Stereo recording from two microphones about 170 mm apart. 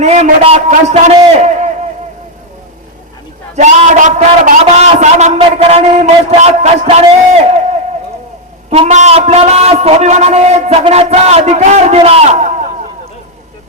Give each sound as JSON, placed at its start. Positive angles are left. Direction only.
{"t": 0.0, "sound": "a man's voice", "side_deg": -40}
{"t": 3.5, "sound": "a man's voice", "side_deg": -45}
{"t": 8.7, "sound": "a man's voice", "side_deg": -40}